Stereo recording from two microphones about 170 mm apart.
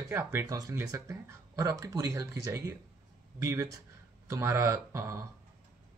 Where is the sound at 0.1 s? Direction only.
15° right (ahead or behind).